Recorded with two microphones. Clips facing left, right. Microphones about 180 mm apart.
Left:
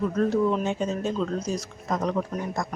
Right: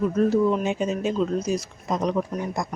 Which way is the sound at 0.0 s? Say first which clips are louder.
Right 3 dB; 10° right (ahead or behind).